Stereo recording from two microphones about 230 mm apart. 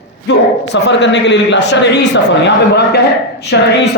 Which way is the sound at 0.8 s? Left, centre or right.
Left.